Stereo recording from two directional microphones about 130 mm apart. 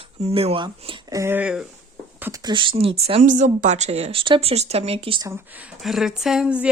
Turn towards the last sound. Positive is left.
turn(degrees=-10)  # may be behind; listen again after turning